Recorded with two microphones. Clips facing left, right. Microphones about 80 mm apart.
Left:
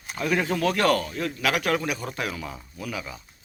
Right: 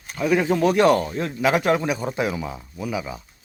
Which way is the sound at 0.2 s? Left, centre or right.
Centre.